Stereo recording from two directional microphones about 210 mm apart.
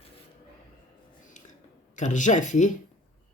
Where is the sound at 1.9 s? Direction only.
35° left (ahead or behind).